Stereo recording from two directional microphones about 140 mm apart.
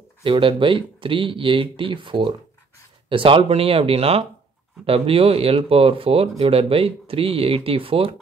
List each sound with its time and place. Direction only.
0.2 s speech: 40° right (ahead or behind)